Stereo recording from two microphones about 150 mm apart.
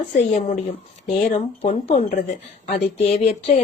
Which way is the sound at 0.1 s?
55° left (ahead or behind).